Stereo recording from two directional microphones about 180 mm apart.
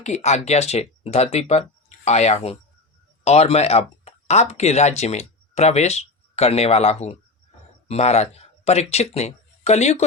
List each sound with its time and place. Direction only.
0.0 s speech: 40° left (ahead or behind)